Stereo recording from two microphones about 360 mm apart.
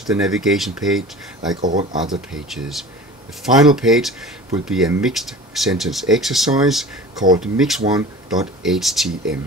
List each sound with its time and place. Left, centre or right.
0.0 s speech: centre
1.6 s speech: right
2.0 s speech: centre